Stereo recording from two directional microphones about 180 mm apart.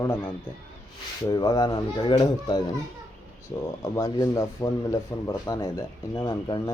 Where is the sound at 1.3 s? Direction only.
25° left (ahead or behind).